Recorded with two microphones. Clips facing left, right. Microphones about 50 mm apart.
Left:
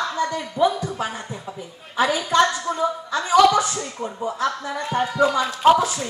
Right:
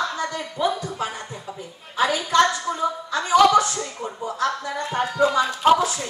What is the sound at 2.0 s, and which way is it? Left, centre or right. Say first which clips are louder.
Speech: left 1 dB; centre.